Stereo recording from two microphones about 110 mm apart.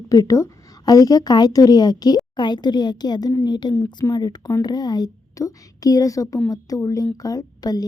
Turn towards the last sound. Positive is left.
turn(degrees=35)  # may be behind; listen again after turning